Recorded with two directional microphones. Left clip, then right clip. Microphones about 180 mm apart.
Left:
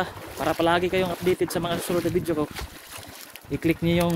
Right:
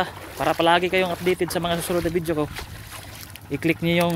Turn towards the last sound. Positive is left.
turn(degrees=0)  # may be behind; listen again after turning